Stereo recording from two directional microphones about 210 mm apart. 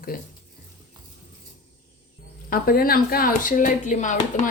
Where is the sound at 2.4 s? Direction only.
45° left (ahead or behind).